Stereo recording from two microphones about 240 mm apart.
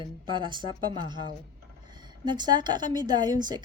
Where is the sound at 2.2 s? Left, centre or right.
Centre.